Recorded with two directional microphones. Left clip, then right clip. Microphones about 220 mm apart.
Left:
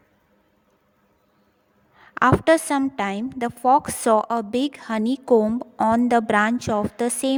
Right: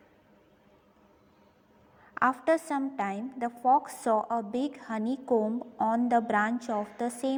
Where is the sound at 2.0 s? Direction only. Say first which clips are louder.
Left 9 dB; 35° left (ahead or behind).